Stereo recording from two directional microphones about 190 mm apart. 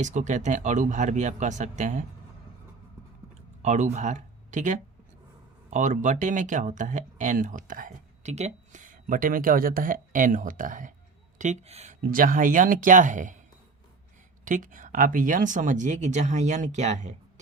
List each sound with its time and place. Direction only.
0.0 s speech: 40° right (ahead or behind)
3.6 s speech: 35° right (ahead or behind)
14.4 s speech: 45° right (ahead or behind)